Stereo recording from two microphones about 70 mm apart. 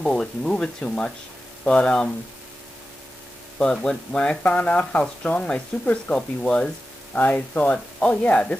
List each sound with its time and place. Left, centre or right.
0.0 s speech: centre
3.5 s speech: centre